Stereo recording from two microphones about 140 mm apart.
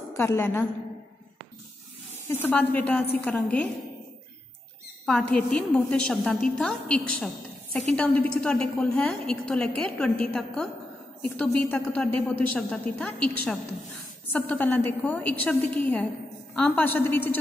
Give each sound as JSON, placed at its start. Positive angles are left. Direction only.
{"t": 0.1, "sound": "a woman's voice", "side_deg": 20}
{"t": 2.2, "sound": "a woman's voice", "side_deg": 15}
{"t": 5.0, "sound": "a woman's voice", "side_deg": 5}